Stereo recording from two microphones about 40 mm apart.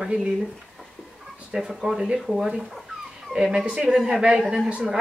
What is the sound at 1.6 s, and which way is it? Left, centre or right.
Speech, centre.